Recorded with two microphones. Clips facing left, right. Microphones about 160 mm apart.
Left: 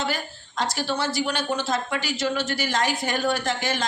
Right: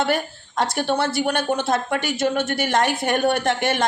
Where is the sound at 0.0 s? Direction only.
60° right (ahead or behind).